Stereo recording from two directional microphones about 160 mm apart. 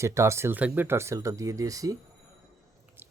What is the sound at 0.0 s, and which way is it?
Speech, 20° right (ahead or behind).